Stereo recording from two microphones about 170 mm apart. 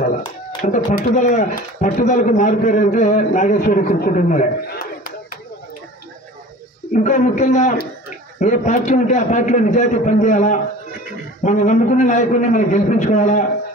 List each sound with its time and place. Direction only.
0.6 s speech: 45° left (ahead or behind)
6.9 s speech: 45° left (ahead or behind)